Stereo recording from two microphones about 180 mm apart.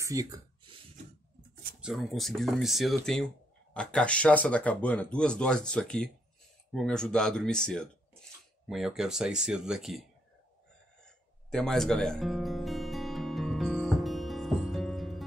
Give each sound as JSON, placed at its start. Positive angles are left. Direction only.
{"t": 0.0, "sound": "a sound", "side_deg": -20}
{"t": 1.8, "sound": "speech", "side_deg": 0}
{"t": 11.5, "sound": "music", "side_deg": 5}